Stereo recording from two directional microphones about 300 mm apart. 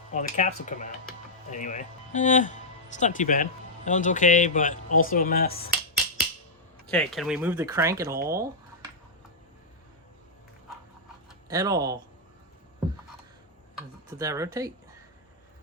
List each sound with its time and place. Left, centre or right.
0.1 s speech: left
6.9 s speech: centre
11.4 s speech: centre
14.2 s speech: centre